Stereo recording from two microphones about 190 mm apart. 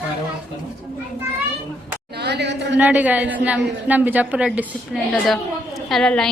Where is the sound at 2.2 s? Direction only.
65° right (ahead or behind).